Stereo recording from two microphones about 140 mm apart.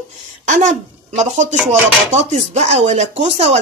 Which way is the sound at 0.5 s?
60° right (ahead or behind).